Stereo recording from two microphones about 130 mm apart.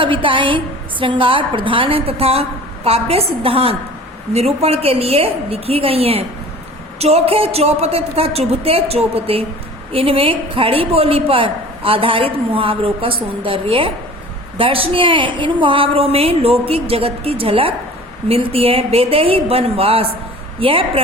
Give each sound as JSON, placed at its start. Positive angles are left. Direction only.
{"t": 0.0, "sound": "a woman's voice", "side_deg": -40}